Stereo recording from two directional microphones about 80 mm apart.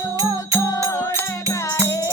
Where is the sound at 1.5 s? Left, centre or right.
Left.